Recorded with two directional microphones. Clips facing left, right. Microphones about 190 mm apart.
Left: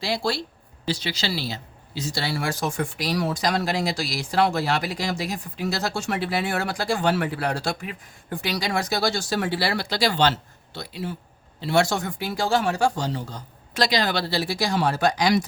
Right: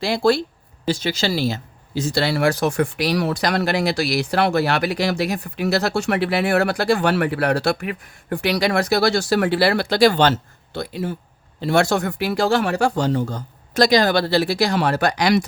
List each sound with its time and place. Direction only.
0.0 s speech: 55° right (ahead or behind)